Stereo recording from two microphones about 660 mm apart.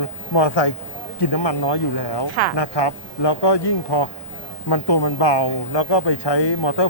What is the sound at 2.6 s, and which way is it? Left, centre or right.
Speech, left.